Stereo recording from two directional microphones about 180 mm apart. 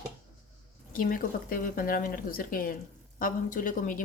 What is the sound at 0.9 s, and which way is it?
Speech, 50° left (ahead or behind).